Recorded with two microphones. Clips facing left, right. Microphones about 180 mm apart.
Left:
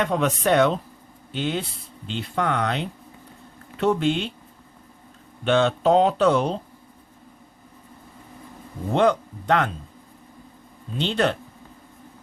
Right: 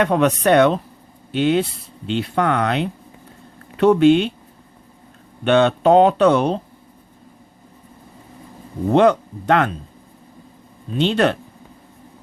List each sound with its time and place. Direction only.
0.0 s speech: 65° right (ahead or behind)
5.5 s speech: 65° right (ahead or behind)
8.9 s speech: 65° right (ahead or behind)
10.9 s speech: 70° right (ahead or behind)